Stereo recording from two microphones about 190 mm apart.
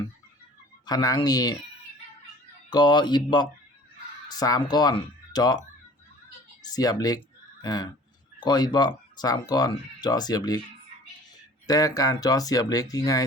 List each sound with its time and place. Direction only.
0.9 s speech: 20° left (ahead or behind)
2.6 s speech: 25° left (ahead or behind)
6.7 s speech: 20° left (ahead or behind)
11.6 s speech: 20° left (ahead or behind)